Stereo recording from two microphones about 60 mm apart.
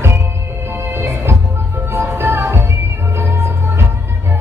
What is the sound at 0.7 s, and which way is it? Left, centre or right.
Music, right.